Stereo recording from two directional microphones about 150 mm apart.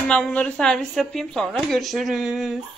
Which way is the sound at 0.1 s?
5° left (ahead or behind).